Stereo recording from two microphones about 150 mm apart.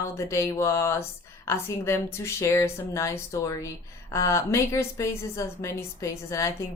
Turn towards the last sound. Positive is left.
turn(degrees=20)  # may be behind; listen again after turning